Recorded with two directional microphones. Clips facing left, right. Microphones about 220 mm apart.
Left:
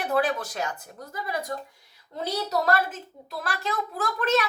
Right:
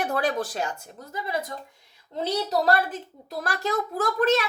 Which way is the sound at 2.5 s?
30° right (ahead or behind).